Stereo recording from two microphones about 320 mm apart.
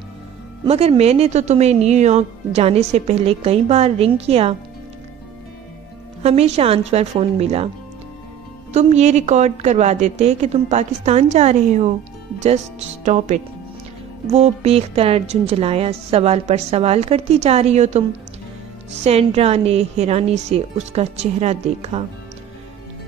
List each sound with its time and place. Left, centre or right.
0.7 s speech: centre
6.2 s speech: centre
8.7 s speech: right
13.0 s speech: right
19.0 s speech: centre